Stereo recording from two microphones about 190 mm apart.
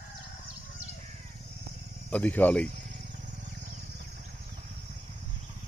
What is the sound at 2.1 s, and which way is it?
Speech, 10° left (ahead or behind).